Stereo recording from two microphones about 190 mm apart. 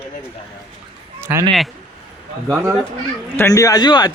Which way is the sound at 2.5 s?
10° right (ahead or behind).